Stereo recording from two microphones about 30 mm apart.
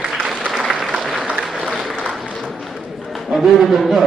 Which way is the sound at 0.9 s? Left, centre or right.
Centre.